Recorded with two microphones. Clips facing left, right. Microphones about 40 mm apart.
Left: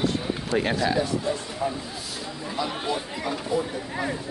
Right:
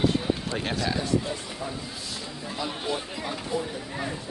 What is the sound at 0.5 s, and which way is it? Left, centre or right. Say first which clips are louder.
Speech: left 5 dB; centre.